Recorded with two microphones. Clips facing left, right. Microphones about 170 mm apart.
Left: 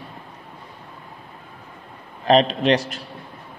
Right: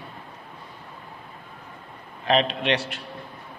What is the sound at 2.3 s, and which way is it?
Speech, 40° left (ahead or behind).